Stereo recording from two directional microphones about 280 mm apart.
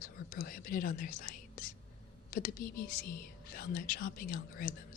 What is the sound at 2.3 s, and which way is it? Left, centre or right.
Speech, left.